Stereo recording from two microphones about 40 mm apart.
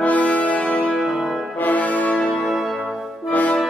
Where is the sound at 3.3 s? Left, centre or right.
Left.